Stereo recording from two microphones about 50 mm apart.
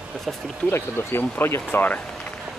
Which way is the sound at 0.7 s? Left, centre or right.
Left.